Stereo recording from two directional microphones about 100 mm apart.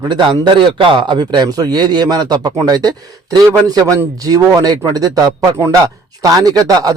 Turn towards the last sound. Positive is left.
turn(degrees=-40)  # may be behind; listen again after turning